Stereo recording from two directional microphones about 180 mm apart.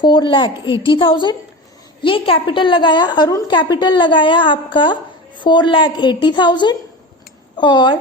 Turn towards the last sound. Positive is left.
turn(degrees=25)  # may be behind; listen again after turning